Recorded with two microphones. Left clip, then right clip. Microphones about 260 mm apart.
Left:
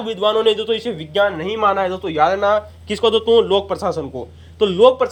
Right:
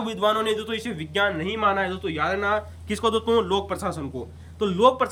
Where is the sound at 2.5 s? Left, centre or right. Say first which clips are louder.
Left 7 dB; centre.